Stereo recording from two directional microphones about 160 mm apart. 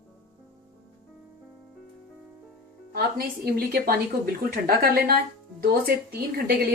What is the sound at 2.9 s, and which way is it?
A woman's voice, 70° right (ahead or behind).